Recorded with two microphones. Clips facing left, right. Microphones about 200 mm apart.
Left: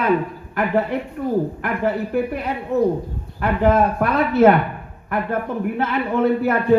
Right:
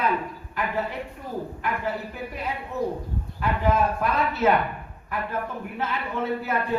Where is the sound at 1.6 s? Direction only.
60° left (ahead or behind).